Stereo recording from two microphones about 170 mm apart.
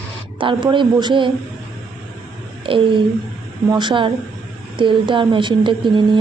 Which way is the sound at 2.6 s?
30° right (ahead or behind).